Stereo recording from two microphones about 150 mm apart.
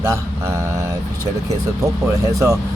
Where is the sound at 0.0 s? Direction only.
20° right (ahead or behind).